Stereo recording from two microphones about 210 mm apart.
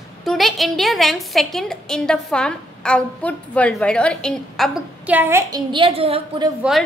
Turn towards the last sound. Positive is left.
turn(degrees=-25)  # may be behind; listen again after turning